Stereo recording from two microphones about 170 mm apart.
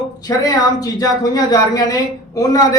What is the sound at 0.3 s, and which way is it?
Speech, 20° left (ahead or behind).